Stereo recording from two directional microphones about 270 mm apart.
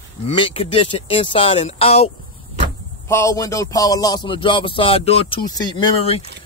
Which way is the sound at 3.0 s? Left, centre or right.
Centre.